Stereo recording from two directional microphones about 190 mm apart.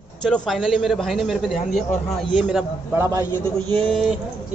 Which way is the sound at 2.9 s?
15° right (ahead or behind).